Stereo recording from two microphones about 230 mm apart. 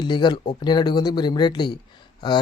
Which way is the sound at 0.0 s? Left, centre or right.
Centre.